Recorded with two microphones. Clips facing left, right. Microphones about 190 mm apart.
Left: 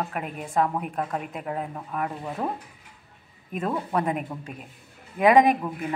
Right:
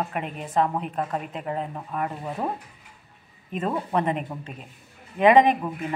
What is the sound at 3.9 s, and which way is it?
Speech, 5° left (ahead or behind).